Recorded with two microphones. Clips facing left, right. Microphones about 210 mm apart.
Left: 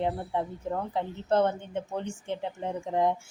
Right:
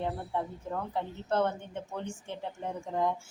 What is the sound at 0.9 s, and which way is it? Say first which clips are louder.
A woman's voice: left 4 dB; 20° left (ahead or behind).